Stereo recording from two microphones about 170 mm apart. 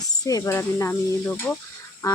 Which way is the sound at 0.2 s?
20° left (ahead or behind).